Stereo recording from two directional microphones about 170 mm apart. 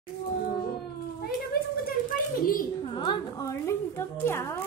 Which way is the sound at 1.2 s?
60° left (ahead or behind).